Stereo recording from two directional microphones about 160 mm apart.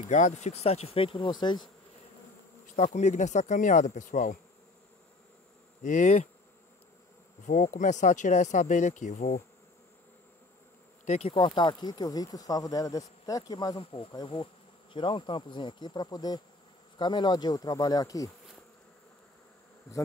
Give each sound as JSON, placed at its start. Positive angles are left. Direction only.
{"t": 0.1, "sound": "speech", "side_deg": 45}
{"t": 2.6, "sound": "speech", "side_deg": 45}
{"t": 5.8, "sound": "speech", "side_deg": 50}
{"t": 7.4, "sound": "speech", "side_deg": 50}
{"t": 11.1, "sound": "speech", "side_deg": 40}